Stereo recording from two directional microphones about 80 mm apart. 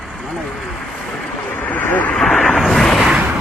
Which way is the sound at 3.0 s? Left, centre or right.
Centre.